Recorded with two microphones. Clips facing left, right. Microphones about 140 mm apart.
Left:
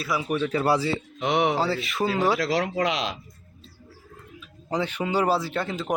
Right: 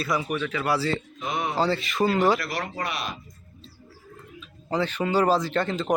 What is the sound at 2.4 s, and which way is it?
Speech, 90° left.